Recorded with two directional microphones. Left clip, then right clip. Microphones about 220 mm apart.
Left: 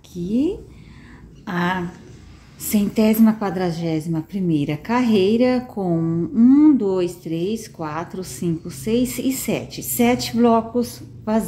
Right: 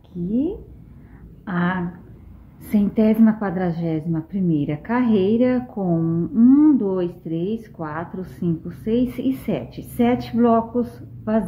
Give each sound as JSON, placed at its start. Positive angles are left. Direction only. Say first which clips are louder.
{"t": 1.4, "sound": "a woman's voice", "louder": "left 2 dB", "side_deg": 5}